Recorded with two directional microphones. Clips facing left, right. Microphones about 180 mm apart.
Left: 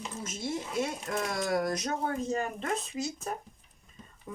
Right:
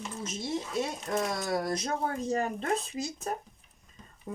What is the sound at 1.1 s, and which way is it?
Speech, 25° right (ahead or behind).